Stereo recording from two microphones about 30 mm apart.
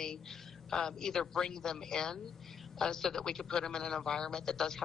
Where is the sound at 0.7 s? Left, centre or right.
Left.